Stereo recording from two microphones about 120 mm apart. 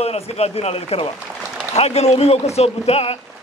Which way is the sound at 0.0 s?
60° left (ahead or behind).